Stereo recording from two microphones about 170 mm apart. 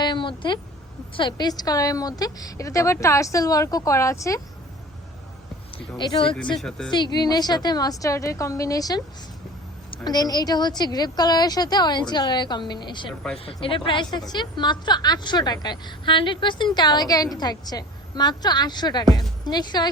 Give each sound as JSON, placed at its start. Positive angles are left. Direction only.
{"t": 0.0, "sound": "a sound", "side_deg": 30}
{"t": 1.1, "sound": "a woman's voice", "side_deg": 25}
{"t": 6.0, "sound": "a woman's voice", "side_deg": 25}
{"t": 6.6, "sound": "speech", "side_deg": 5}
{"t": 6.9, "sound": "a woman's voice", "side_deg": 25}